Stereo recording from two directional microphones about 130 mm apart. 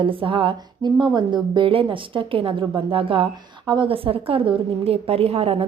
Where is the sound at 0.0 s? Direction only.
40° right (ahead or behind).